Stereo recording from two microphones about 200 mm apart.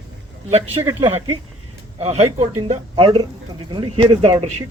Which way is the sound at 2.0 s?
30° right (ahead or behind).